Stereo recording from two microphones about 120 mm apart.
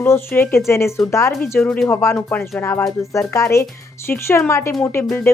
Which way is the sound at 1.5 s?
10° left (ahead or behind).